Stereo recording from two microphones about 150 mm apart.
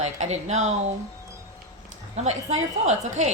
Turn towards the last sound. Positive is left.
turn(degrees=-50)  # may be behind; listen again after turning